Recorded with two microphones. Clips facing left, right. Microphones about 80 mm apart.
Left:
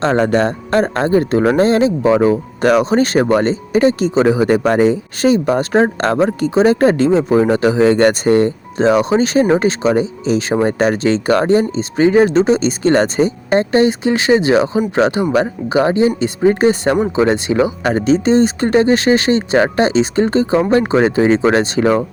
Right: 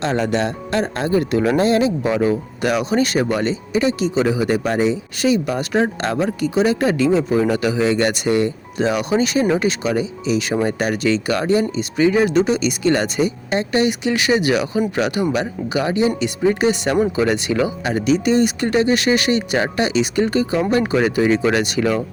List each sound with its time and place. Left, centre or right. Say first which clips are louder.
0.0 s speech: left 6 dB; left